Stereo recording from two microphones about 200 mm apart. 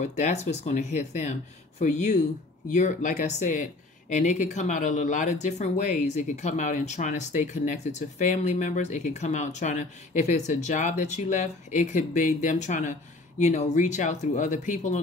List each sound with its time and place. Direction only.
0.0 s speech: 35° left (ahead or behind)